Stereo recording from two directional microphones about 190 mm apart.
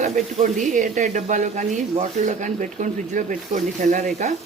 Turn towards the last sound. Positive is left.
turn(degrees=-40)  # may be behind; listen again after turning